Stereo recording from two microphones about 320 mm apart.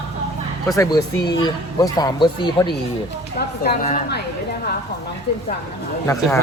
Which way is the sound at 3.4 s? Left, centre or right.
Left.